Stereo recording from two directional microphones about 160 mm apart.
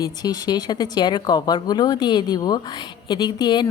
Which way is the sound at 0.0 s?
25° left (ahead or behind).